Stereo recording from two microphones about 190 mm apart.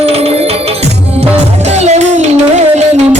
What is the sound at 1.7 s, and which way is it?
Music, 35° right (ahead or behind).